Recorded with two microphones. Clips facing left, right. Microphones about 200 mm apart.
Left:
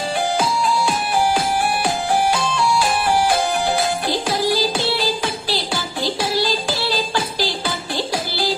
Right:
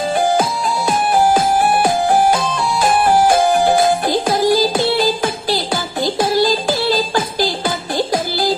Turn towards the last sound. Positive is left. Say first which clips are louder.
# right 4 dB
turn(degrees=-50)  # may be behind; listen again after turning